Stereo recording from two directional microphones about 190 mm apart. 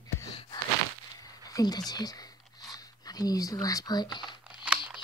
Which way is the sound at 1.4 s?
20° left (ahead or behind).